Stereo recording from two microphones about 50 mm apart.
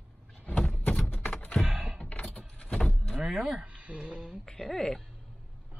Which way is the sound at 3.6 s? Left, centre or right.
Right.